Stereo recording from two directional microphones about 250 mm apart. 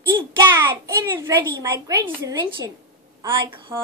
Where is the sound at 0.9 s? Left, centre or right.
Centre.